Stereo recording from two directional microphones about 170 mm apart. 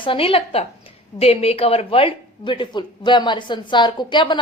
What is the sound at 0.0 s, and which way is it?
A woman's voice, 30° left (ahead or behind).